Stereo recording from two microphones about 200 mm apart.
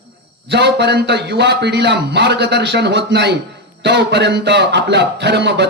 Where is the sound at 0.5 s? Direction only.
60° right (ahead or behind).